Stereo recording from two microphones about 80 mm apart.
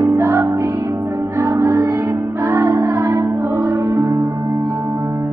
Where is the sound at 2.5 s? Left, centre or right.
Right.